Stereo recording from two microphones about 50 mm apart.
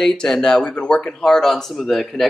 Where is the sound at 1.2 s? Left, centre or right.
Centre.